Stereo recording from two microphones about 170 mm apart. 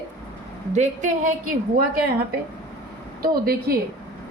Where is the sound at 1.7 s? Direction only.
65° right (ahead or behind).